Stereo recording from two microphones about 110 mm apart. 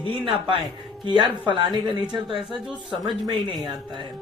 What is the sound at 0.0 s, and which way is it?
A man's voice, 55° right (ahead or behind).